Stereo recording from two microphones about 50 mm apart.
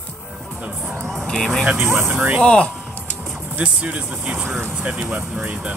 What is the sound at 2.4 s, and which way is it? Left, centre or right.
Speech, centre.